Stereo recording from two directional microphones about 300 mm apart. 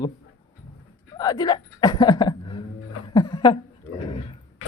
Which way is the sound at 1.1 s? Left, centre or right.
Centre.